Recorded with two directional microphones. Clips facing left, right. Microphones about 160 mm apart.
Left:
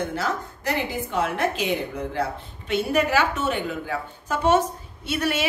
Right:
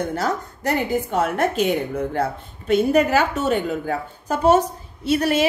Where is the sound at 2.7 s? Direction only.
40° right (ahead or behind).